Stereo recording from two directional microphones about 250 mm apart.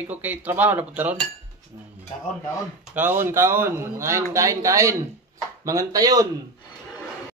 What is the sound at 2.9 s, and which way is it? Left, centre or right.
Speech, centre.